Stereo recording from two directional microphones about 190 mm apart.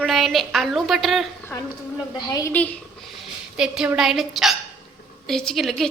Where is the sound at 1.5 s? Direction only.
10° left (ahead or behind).